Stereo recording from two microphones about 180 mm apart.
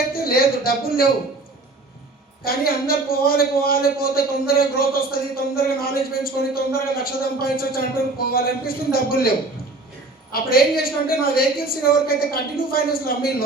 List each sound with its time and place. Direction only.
0.1 s speech: 55° left (ahead or behind)
2.4 s a man's voice: 55° left (ahead or behind)
10.3 s a man's voice: 55° left (ahead or behind)